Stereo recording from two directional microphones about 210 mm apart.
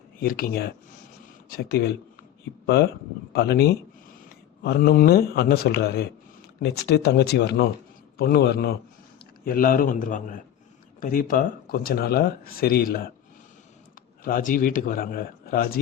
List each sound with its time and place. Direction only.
0.2 s speech: 45° left (ahead or behind)
3.3 s a man's voice: 50° left (ahead or behind)
14.3 s speech: 40° left (ahead or behind)